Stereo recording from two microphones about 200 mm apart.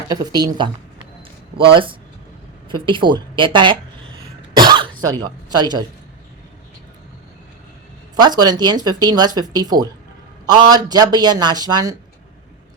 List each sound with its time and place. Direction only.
0.1 s speech: 20° right (ahead or behind)
1.7 s speech: 25° right (ahead or behind)
4.5 s cough: 20° right (ahead or behind)
5.2 s speech: 20° right (ahead or behind)
8.1 s speech: 20° right (ahead or behind)